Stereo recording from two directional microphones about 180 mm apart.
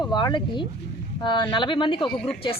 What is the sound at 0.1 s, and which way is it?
A woman's voice, 25° left (ahead or behind).